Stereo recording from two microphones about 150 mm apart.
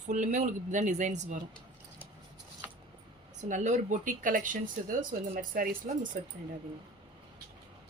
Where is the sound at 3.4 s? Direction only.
55° right (ahead or behind).